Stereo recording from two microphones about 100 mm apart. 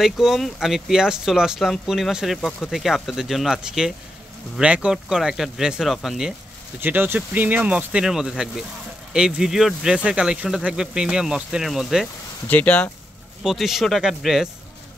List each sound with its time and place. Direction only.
0.0 s speech: 5° right (ahead or behind)
6.8 s speech: 20° right (ahead or behind); by 12.1 s centre (ahead or behind)
12.4 s speech: 15° left (ahead or behind)
13.4 s speech: 5° right (ahead or behind)